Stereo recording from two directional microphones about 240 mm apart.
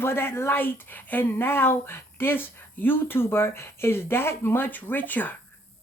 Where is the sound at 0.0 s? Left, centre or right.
Centre.